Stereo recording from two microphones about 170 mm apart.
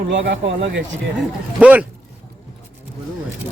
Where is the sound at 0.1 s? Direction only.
90° right.